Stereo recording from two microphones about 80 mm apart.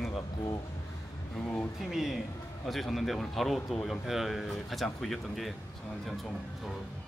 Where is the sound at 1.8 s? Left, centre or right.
Centre.